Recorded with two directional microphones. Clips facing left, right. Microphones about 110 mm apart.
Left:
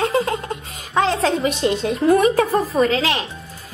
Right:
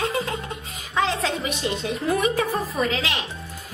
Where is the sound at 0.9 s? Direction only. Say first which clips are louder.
Left 6 dB; 55° left (ahead or behind).